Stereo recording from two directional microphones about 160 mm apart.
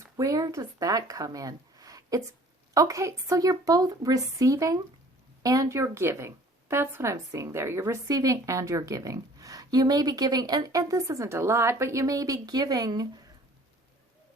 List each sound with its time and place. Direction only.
0.0 s speech: 20° right (ahead or behind)